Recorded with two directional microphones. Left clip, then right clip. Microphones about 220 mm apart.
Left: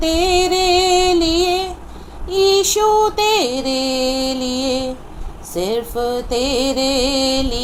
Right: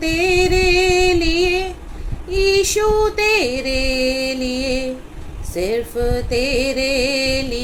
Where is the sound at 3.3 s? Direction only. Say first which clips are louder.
Left 1 dB; 25° left (ahead or behind).